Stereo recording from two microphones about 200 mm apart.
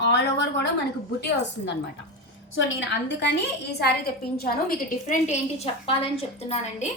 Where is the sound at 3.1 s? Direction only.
60° left (ahead or behind).